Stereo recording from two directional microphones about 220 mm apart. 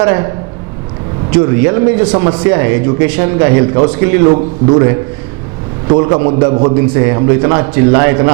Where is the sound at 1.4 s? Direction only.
10° right (ahead or behind).